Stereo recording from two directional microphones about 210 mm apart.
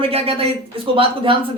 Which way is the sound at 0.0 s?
30° right (ahead or behind).